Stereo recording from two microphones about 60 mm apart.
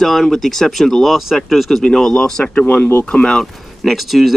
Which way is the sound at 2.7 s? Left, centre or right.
Left.